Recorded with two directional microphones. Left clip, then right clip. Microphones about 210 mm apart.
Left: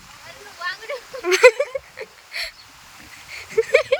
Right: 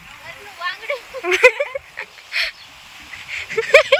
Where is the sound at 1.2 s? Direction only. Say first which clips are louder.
Even; 10° left (ahead or behind).